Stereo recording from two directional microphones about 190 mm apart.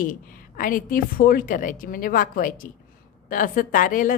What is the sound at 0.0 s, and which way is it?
A woman's voice, 45° left (ahead or behind).